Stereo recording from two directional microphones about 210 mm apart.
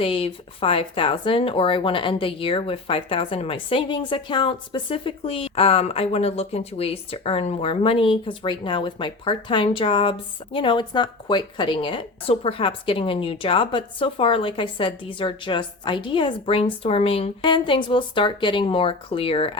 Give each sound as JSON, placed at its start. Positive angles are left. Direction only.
{"t": 0.0, "sound": "speech", "side_deg": 25}